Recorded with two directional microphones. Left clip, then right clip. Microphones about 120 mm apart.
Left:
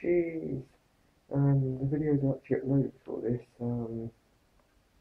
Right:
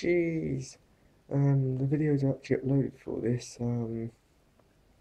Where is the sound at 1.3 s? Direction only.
30° right (ahead or behind).